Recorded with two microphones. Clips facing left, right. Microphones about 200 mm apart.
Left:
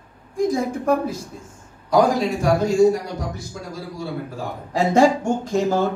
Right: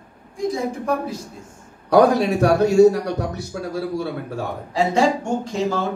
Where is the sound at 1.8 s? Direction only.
65° right (ahead or behind).